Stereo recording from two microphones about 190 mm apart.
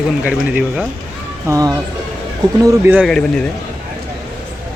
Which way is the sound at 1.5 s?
20° right (ahead or behind).